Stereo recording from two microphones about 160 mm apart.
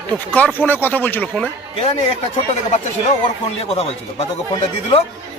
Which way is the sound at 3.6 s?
40° left (ahead or behind).